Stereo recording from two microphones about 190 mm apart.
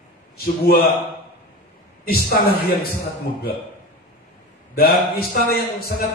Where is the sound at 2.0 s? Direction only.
55° left (ahead or behind).